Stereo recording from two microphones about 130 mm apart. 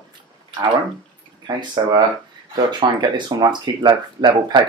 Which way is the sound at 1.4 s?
35° right (ahead or behind).